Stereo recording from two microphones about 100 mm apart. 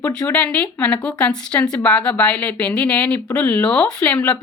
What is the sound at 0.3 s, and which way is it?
Speech, 15° left (ahead or behind).